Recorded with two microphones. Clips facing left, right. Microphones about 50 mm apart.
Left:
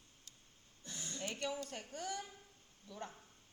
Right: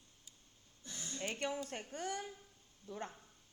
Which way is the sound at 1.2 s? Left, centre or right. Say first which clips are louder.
Right 2 dB; right.